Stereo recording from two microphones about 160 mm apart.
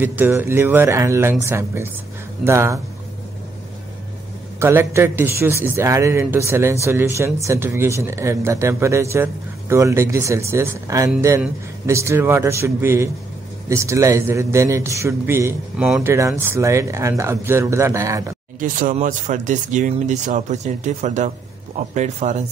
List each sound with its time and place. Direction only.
0.0 s a man's voice: 10° right (ahead or behind)
4.6 s a man's voice: 15° right (ahead or behind)
18.6 s speech: 55° right (ahead or behind)